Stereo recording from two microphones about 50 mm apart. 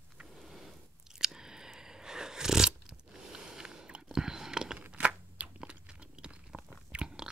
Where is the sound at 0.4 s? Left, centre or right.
Centre.